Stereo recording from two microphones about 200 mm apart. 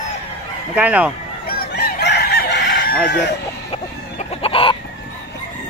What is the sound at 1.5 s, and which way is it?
Fowl, 50° left (ahead or behind).